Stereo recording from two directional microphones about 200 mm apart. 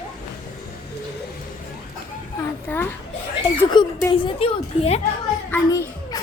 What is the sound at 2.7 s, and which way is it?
Children playing, 10° left (ahead or behind).